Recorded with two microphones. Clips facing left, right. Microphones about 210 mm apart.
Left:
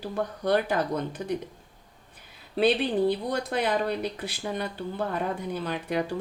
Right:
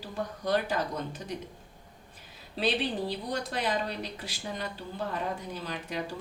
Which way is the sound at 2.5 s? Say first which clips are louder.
Left 6 dB; 60° left (ahead or behind).